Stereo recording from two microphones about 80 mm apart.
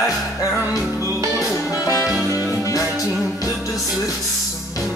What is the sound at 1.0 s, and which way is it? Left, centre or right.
Music, right.